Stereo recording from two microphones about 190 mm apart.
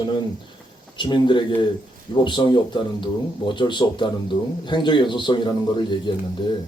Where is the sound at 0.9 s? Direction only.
25° left (ahead or behind).